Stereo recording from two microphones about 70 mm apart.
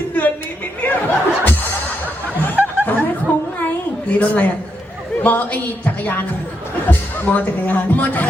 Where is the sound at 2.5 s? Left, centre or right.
Right.